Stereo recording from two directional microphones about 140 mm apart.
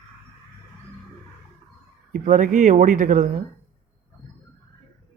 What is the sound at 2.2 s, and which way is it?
Speech, 60° right (ahead or behind).